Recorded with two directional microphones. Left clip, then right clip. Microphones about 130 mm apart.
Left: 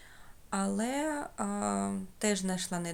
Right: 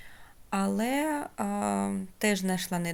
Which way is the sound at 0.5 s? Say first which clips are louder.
Right 4 dB; 25° right (ahead or behind).